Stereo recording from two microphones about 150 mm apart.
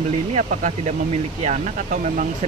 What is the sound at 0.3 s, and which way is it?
Speech, 50° right (ahead or behind).